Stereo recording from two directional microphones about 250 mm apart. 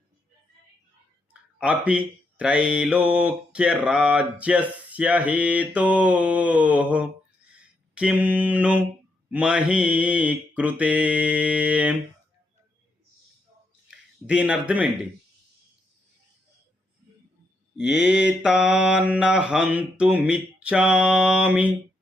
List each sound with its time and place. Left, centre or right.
1.3 s speech: centre
7.9 s mantra: centre
9.3 s speech: centre
13.9 s speech: centre
17.9 s speech: centre